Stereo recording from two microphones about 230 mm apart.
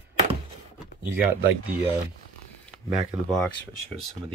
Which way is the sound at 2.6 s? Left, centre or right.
Centre.